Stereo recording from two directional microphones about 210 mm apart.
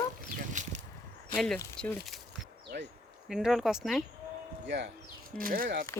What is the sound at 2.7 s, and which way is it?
Speech, 45° right (ahead or behind).